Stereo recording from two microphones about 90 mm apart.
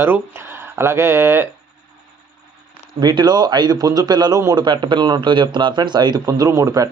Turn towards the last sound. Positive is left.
turn(degrees=-40)  # may be behind; listen again after turning